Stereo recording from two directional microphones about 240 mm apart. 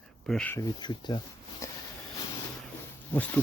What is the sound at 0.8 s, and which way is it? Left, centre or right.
Speech, centre.